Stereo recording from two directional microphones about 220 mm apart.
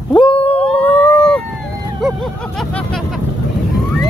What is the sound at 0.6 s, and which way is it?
Howl, 5° left (ahead or behind).